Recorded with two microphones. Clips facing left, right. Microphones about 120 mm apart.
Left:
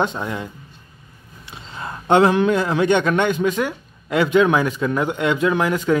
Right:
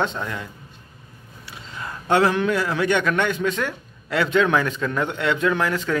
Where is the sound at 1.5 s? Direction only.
25° left (ahead or behind).